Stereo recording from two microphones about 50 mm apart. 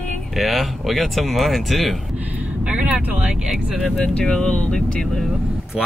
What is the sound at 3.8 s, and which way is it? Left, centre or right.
Speech, centre.